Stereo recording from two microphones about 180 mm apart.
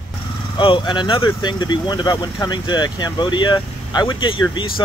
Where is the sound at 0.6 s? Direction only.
25° left (ahead or behind).